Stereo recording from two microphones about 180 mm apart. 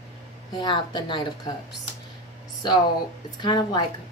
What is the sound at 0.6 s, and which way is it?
Speech, 25° left (ahead or behind).